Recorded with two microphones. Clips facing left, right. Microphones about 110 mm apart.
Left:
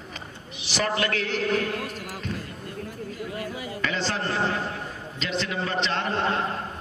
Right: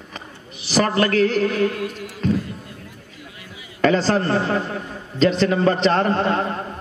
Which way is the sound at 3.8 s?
40° right (ahead or behind).